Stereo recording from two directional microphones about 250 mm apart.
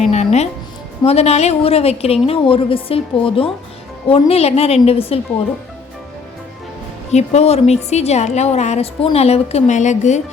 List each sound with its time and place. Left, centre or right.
0.1 s a woman's voice: left
7.1 s a woman's voice: left